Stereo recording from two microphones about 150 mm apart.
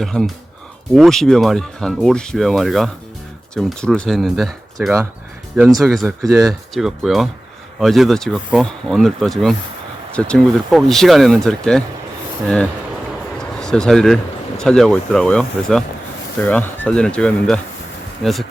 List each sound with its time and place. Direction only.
0.0 s speech: centre (ahead or behind)
6.1 s speech: 20° right (ahead or behind)
6.5 s speech: centre (ahead or behind)
13.4 s a sound: 5° left (ahead or behind)
14.6 s speech: 5° left (ahead or behind)